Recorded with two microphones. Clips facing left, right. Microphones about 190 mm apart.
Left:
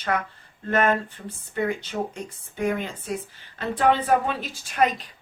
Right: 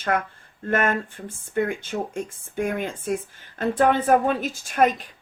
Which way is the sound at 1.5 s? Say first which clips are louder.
Right 2 dB; 50° right (ahead or behind).